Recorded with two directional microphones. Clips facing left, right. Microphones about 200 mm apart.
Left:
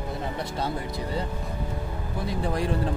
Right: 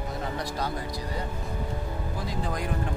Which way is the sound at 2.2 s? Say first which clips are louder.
Left 6 dB; 30° left (ahead or behind).